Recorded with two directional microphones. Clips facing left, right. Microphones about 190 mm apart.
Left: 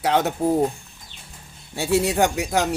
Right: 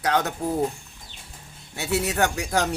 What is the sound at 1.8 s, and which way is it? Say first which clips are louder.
Speech: left 5 dB; 30° left (ahead or behind).